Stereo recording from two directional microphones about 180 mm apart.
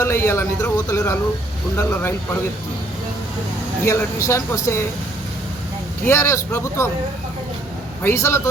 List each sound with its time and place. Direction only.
0.0 s a man's voice: 15° left (ahead or behind)
3.8 s a man's voice: 15° left (ahead or behind)
6.1 s a man's voice: 15° left (ahead or behind)
8.0 s a man's voice: 15° left (ahead or behind)